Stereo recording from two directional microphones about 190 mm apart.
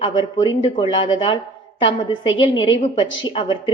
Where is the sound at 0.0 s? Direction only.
25° left (ahead or behind).